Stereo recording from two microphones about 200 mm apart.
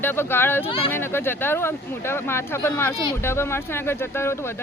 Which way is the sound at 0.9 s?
10° left (ahead or behind).